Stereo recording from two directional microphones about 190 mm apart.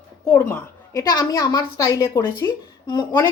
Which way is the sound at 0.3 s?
15° left (ahead or behind).